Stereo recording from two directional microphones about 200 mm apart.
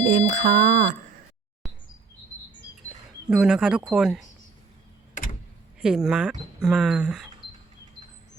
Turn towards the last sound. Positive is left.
turn(degrees=-5)  # may be behind; listen again after turning